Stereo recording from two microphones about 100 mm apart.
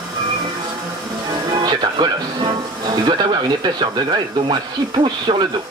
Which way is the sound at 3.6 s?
50° right (ahead or behind).